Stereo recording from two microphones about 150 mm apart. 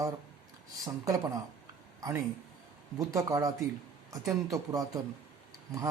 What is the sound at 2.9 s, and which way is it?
Speech, 20° right (ahead or behind).